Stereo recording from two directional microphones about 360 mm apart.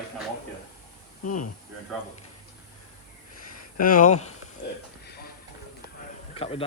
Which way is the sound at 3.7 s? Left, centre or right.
Left.